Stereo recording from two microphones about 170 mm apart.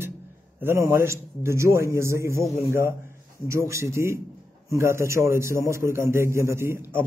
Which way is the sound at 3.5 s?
15° right (ahead or behind).